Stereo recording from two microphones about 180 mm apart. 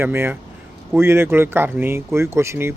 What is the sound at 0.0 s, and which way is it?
Speech, 15° right (ahead or behind).